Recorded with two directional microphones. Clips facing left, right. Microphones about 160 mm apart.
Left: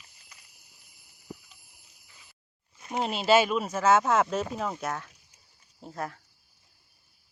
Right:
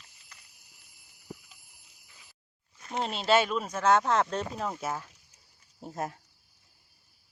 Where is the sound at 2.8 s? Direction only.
10° left (ahead or behind).